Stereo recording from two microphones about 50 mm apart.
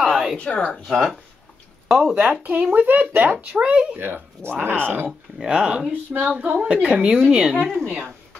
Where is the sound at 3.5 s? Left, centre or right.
Right.